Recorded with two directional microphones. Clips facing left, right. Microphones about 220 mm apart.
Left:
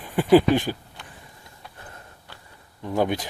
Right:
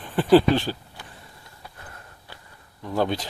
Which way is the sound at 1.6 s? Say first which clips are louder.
Right 1 dB; 5° right (ahead or behind).